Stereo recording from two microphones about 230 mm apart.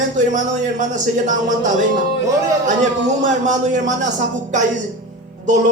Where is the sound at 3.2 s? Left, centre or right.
Right.